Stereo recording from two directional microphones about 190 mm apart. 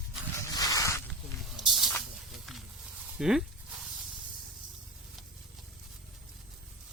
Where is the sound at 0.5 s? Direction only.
20° left (ahead or behind).